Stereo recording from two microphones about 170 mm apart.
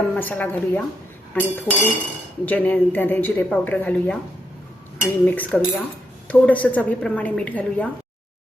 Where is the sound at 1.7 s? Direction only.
15° right (ahead or behind).